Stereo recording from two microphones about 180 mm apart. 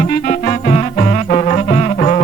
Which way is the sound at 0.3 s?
40° left (ahead or behind).